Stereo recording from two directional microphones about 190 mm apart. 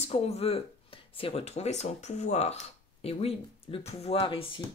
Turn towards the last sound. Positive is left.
turn(degrees=30)  # may be behind; listen again after turning